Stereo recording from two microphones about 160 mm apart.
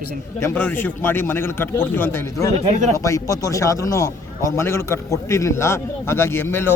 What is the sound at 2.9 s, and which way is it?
A man's voice, 20° left (ahead or behind).